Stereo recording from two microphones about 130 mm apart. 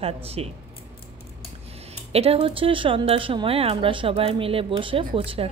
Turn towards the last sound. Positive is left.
turn(degrees=-45)  # may be behind; listen again after turning